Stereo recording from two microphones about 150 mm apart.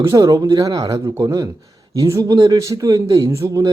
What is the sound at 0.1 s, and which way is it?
Speech, 25° right (ahead or behind).